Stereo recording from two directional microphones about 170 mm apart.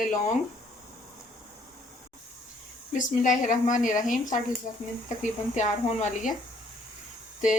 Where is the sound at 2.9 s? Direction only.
50° left (ahead or behind).